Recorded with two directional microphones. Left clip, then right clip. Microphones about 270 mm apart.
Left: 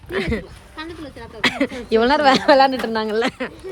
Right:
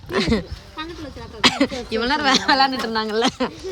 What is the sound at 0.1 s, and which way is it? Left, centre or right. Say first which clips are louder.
Speech: right 2 dB; centre.